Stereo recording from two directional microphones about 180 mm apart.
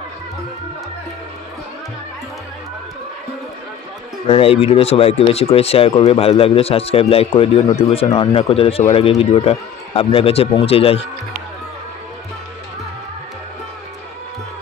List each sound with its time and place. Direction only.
4.3 s speech: 30° left (ahead or behind)